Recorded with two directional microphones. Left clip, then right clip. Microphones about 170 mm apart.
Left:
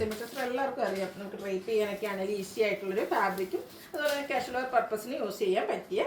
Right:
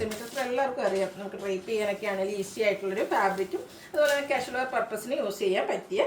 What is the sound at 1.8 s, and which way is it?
Speech, 15° right (ahead or behind).